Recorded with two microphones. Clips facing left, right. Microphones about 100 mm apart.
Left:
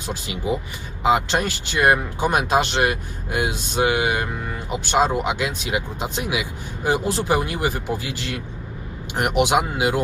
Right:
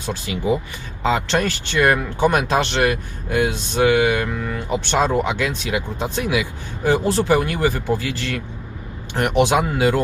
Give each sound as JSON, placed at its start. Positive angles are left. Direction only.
{"t": 1.0, "sound": "speech", "side_deg": 15}